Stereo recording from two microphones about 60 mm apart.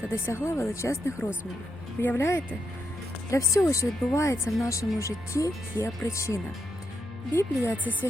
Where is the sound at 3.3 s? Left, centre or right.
Left.